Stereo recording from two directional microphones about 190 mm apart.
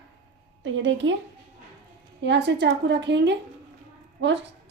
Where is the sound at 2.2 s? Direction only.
65° right (ahead or behind).